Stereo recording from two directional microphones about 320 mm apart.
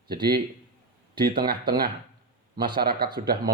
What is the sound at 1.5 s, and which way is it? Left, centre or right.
Speech, right.